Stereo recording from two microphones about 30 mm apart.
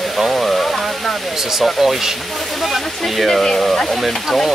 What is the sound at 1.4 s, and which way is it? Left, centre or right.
Speech, centre.